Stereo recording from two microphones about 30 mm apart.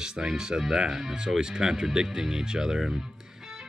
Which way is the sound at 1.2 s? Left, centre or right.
Right.